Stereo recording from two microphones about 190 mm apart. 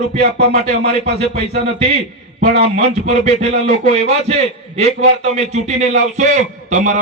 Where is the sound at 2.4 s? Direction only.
35° right (ahead or behind).